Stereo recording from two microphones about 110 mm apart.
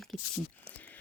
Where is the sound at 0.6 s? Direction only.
15° left (ahead or behind).